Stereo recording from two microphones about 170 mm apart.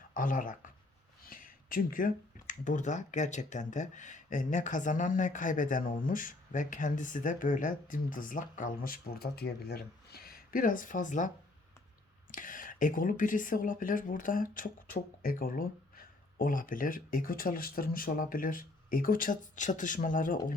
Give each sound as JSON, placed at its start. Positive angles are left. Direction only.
{"t": 0.1, "sound": "speech", "side_deg": 50}
{"t": 12.3, "sound": "speech", "side_deg": 50}